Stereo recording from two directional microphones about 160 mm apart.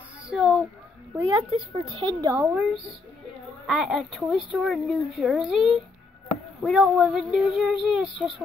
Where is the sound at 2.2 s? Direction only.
15° right (ahead or behind).